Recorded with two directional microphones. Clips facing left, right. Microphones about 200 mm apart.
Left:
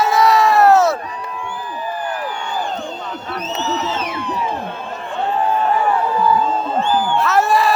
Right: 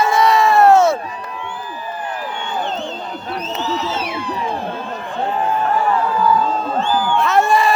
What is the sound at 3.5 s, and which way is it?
Music, 10° right (ahead or behind).